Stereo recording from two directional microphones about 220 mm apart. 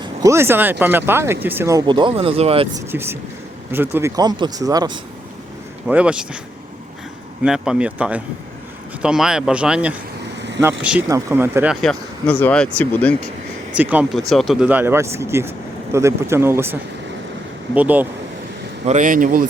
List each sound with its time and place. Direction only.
0.0 s speech: 15° right (ahead or behind)
2.9 s speech: 10° right (ahead or behind)
5.9 s speech: 5° right (ahead or behind)
7.4 s speech: 5° right (ahead or behind)
13.7 s speech: 5° right (ahead or behind)
17.7 s speech: 5° right (ahead or behind)
18.9 s speech: 35° right (ahead or behind)